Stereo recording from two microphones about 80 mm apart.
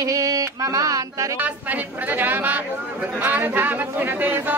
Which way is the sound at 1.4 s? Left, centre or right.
Right.